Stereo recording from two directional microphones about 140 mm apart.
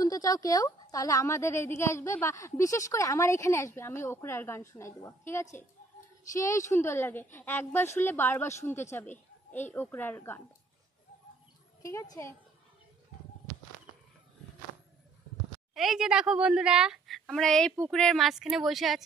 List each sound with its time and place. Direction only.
0.0 s a woman's voice: 25° left (ahead or behind)
11.8 s a woman's voice: 25° left (ahead or behind)
15.7 s a child's voice: centre (ahead or behind)